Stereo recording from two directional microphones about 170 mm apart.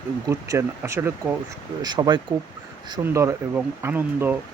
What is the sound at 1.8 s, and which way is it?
Speech, 25° right (ahead or behind).